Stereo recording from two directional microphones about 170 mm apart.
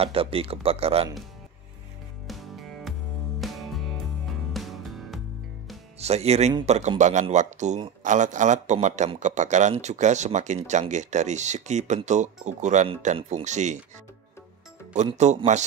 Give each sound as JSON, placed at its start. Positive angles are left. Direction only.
{"t": 0.0, "sound": "speech", "side_deg": -35}
{"t": 2.2, "sound": "music", "side_deg": 0}
{"t": 5.9, "sound": "a man's voice", "side_deg": -40}
{"t": 15.1, "sound": "a man's voice", "side_deg": -40}